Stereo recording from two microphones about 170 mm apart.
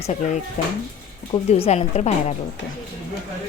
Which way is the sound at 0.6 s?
45° left (ahead or behind).